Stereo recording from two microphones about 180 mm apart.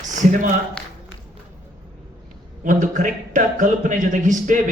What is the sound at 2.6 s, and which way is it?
A man's voice, 45° right (ahead or behind).